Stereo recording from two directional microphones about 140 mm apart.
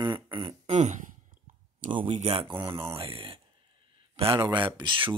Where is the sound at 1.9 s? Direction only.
40° right (ahead or behind).